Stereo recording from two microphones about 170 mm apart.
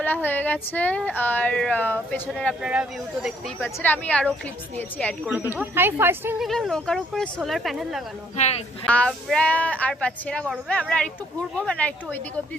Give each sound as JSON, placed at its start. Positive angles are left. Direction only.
{"t": 0.0, "sound": "speech", "side_deg": 10}
{"t": 3.8, "sound": "speech", "side_deg": 10}
{"t": 5.2, "sound": "speech", "side_deg": -10}
{"t": 6.4, "sound": "speech", "side_deg": 0}
{"t": 8.4, "sound": "speech", "side_deg": 40}
{"t": 8.9, "sound": "speech", "side_deg": 5}